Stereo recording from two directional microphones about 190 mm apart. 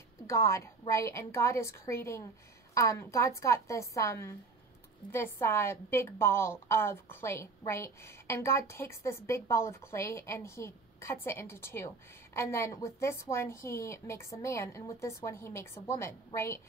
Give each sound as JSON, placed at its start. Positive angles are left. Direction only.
{"t": 0.3, "sound": "a woman's voice", "side_deg": 15}